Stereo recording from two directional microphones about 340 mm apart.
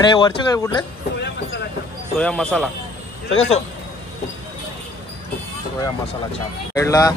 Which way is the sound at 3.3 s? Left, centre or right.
Centre.